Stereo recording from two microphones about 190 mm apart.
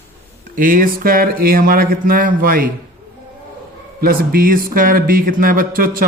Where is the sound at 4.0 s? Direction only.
50° right (ahead or behind).